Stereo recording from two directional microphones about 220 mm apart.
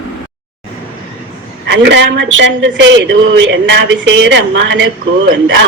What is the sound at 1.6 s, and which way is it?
Speech, 55° right (ahead or behind).